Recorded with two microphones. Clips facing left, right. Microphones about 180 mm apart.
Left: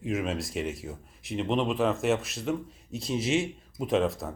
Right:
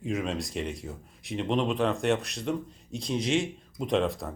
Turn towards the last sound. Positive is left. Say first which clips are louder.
# left 1 dB
turn(degrees=0)  # may be behind; listen again after turning